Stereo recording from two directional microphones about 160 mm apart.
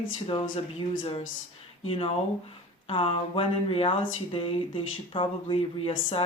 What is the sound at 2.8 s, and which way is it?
Speech, 35° left (ahead or behind).